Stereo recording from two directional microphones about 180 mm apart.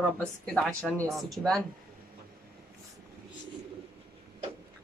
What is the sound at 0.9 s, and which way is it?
Speech, centre (ahead or behind).